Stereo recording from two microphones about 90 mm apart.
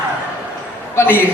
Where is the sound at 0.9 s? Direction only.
25° left (ahead or behind).